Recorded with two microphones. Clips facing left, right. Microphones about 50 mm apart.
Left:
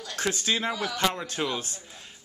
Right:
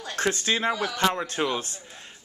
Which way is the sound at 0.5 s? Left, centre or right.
Centre.